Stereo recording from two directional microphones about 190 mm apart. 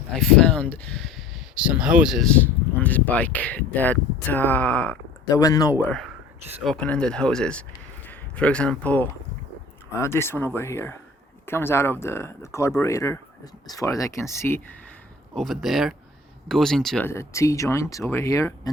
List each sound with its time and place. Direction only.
0.2 s speech: 5° left (ahead or behind)
5.8 s speech: 5° left (ahead or behind)
15.4 s speech: centre (ahead or behind)
17.1 s speech: 15° left (ahead or behind)